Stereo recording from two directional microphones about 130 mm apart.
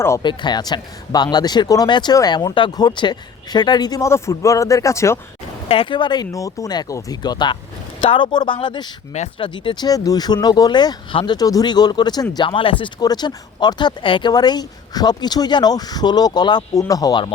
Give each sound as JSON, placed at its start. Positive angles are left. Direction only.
{"t": 0.2, "sound": "speech", "side_deg": 35}
{"t": 5.6, "sound": "speech", "side_deg": 45}
{"t": 11.3, "sound": "speech", "side_deg": 30}